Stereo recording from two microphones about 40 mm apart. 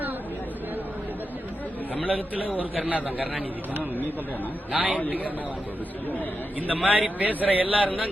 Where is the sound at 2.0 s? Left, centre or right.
Right.